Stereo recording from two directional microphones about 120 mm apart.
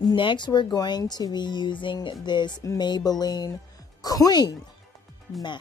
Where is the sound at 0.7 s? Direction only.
35° left (ahead or behind).